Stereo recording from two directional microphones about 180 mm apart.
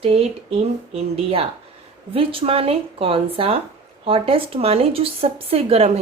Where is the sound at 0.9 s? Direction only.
35° right (ahead or behind).